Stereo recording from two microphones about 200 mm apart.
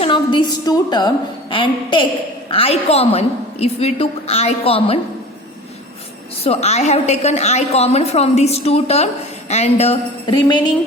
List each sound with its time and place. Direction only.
0.0 s a woman's voice: 25° left (ahead or behind)
6.4 s a woman's voice: 30° left (ahead or behind)